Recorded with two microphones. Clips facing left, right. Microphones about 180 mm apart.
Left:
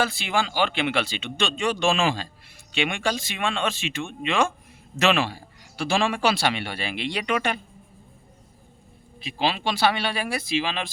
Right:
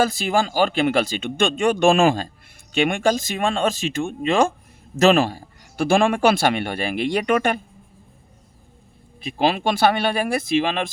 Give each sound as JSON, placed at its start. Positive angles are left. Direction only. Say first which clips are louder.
{"t": 0.0, "sound": "a man's voice", "louder": "right 5 dB", "side_deg": -40}
{"t": 9.2, "sound": "a man's voice", "louder": "right 5 dB", "side_deg": -50}